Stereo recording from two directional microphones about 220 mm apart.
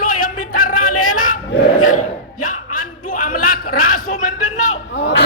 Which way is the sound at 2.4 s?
40° left (ahead or behind).